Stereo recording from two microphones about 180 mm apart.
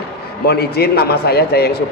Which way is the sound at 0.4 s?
65° left (ahead or behind).